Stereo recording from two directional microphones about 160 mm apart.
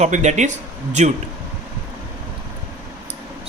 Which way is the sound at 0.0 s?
45° right (ahead or behind).